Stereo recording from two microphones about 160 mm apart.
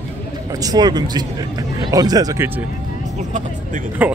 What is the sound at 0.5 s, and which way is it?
Speech, 25° right (ahead or behind).